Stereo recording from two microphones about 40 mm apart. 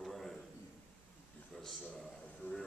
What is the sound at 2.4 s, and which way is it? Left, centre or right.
Speech, left.